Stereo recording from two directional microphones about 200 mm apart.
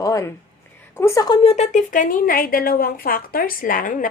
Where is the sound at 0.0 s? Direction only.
15° left (ahead or behind).